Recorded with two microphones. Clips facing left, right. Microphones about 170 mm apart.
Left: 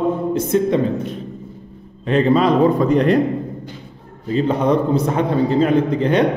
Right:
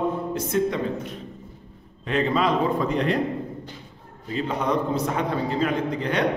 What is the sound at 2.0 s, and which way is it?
A man's voice, 35° left (ahead or behind).